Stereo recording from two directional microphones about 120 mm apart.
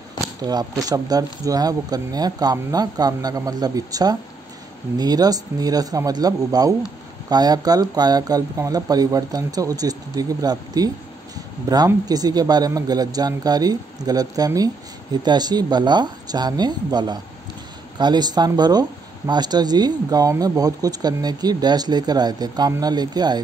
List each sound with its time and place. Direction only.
0.4 s speech: 35° right (ahead or behind)